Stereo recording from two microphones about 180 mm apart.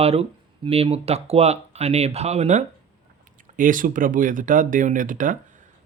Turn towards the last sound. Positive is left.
turn(degrees=-45)  # may be behind; listen again after turning